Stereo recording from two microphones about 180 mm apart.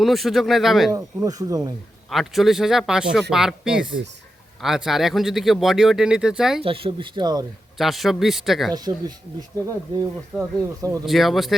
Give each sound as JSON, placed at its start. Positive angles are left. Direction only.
{"t": 0.0, "sound": "speech", "side_deg": 0}
{"t": 0.9, "sound": "speech", "side_deg": -20}
{"t": 2.0, "sound": "speech", "side_deg": 0}
{"t": 6.6, "sound": "speech", "side_deg": -30}
{"t": 7.8, "sound": "speech", "side_deg": 0}
{"t": 8.7, "sound": "speech", "side_deg": -20}
{"t": 10.3, "sound": "speech", "side_deg": 0}